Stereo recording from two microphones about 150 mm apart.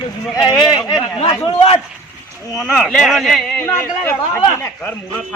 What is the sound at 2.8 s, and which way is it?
Speech, centre (ahead or behind).